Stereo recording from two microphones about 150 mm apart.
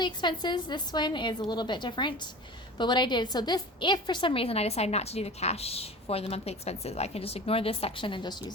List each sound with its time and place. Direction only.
0.0 s a woman's voice: 30° left (ahead or behind)